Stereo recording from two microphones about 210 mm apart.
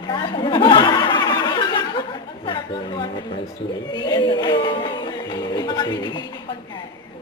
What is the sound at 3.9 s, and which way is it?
Speech, 20° left (ahead or behind).